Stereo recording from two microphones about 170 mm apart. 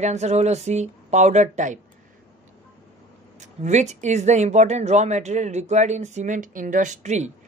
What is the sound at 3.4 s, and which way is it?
Speech, 45° right (ahead or behind).